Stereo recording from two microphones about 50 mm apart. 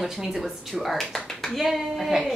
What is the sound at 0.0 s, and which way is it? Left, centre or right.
Speech, centre.